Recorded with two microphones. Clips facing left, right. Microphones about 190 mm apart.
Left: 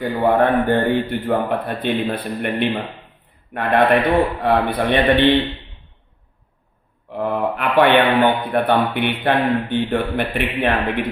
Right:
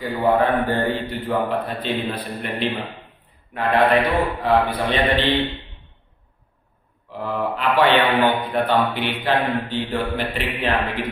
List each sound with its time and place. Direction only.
0.0 s a man's voice: 55° left (ahead or behind)
7.1 s mantra: 60° left (ahead or behind)
8.5 s a man's voice: 55° left (ahead or behind)